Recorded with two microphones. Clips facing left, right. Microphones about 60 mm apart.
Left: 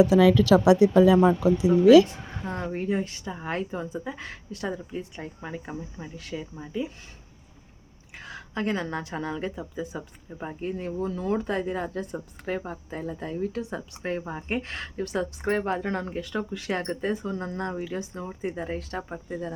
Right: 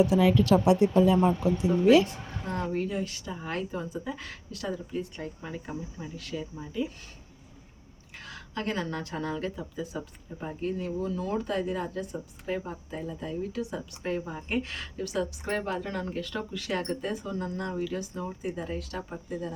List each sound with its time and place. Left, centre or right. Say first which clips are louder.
0.5 s speech: left 4 dB; left
2.5 s speech: left 2 dB; left
4.9 s speech: right 1 dB; centre
8.1 s a woman's voice: left 3 dB; left
10.8 s a woman's voice: left 1 dB; left
16.1 s a woman's voice: left 3 dB; centre; by 17.7 s left
17.7 s a woman's voice: even; left